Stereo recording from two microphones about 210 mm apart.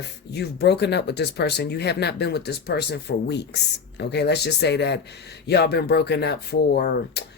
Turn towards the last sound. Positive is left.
turn(degrees=50)  # may be behind; listen again after turning